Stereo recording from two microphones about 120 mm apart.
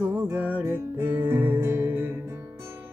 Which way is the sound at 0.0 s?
15° right (ahead or behind).